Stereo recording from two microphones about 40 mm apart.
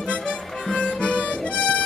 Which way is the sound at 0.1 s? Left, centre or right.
Left.